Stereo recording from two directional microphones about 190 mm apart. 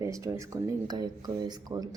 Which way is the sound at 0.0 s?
15° right (ahead or behind).